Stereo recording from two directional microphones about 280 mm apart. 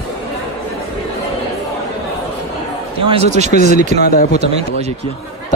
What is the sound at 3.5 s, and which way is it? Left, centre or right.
Speech, left.